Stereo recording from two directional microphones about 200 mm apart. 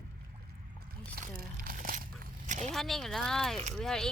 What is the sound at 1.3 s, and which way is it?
Crumpling, 45° right (ahead or behind).